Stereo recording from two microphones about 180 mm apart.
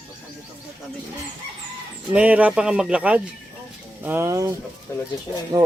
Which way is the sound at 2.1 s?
10° right (ahead or behind).